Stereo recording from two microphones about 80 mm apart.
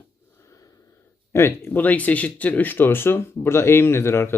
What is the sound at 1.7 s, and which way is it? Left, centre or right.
Speech, left.